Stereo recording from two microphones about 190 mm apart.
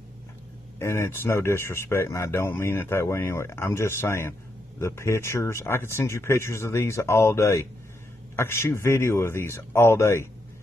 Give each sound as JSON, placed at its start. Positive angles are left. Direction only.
{"t": 0.7, "sound": "speech", "side_deg": 15}